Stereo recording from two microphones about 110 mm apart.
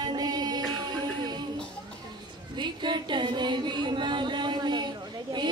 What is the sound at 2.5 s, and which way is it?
Music, 45° right (ahead or behind).